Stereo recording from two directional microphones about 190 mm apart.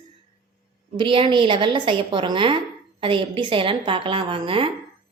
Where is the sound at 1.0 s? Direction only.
25° right (ahead or behind).